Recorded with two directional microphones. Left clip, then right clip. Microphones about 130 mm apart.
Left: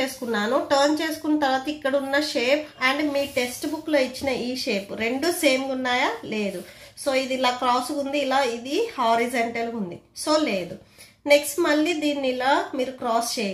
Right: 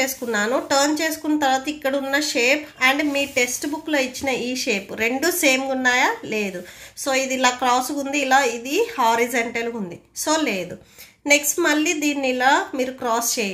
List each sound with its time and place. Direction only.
0.0 s a woman's voice: 30° right (ahead or behind)